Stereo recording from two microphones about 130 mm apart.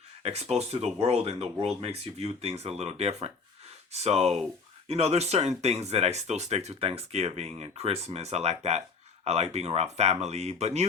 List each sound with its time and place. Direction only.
0.2 s speech: 55° right (ahead or behind)